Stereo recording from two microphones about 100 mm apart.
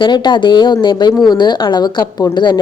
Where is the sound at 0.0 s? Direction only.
50° left (ahead or behind).